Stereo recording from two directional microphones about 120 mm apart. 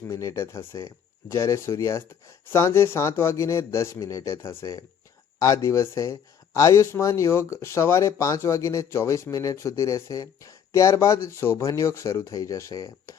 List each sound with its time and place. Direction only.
0.1 s speech: 25° left (ahead or behind)